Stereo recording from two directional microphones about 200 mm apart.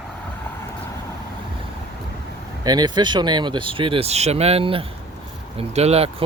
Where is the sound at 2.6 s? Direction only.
20° right (ahead or behind).